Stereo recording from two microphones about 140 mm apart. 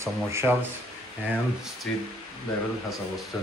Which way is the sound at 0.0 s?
20° right (ahead or behind).